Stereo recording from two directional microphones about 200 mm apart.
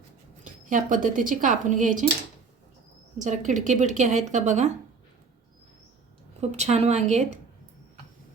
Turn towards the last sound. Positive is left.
turn(degrees=-35)  # may be behind; listen again after turning